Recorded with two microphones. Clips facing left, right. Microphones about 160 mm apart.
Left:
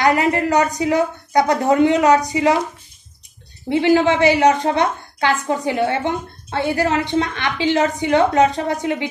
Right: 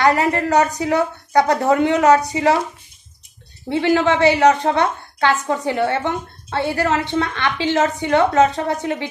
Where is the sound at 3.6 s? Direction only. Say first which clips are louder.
Left 2 dB; 15° left (ahead or behind).